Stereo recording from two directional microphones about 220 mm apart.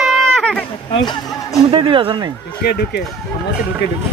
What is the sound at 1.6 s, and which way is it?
Speech, 25° right (ahead or behind).